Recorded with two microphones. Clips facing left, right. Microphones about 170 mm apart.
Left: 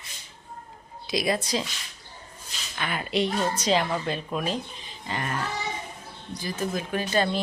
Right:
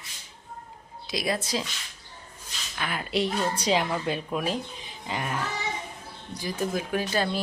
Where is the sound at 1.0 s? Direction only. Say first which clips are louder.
Left 3 dB; centre (ahead or behind).